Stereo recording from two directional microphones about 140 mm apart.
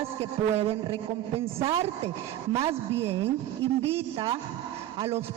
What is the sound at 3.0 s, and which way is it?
A man's voice, 45° right (ahead or behind).